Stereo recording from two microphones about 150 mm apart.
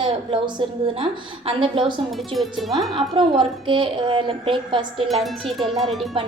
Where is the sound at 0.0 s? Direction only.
35° right (ahead or behind).